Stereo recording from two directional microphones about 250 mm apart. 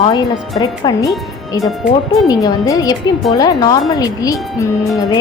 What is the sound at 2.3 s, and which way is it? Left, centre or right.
A woman's voice, centre.